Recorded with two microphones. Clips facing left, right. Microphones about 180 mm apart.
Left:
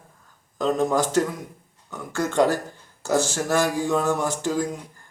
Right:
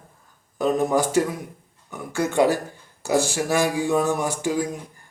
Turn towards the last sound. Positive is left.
turn(degrees=-10)  # may be behind; listen again after turning